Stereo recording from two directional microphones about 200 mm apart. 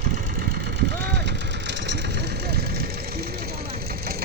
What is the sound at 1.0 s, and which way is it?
Vehicle, 60° right (ahead or behind).